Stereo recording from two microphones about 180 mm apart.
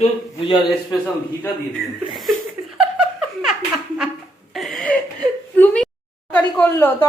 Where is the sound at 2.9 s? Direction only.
Centre (ahead or behind).